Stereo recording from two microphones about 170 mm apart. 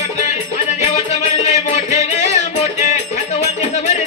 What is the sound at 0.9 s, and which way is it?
Music, 40° left (ahead or behind).